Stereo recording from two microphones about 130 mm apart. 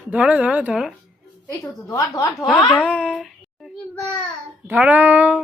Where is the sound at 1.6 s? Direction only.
25° left (ahead or behind).